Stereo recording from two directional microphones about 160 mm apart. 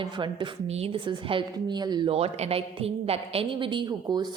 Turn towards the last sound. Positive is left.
turn(degrees=-25)  # may be behind; listen again after turning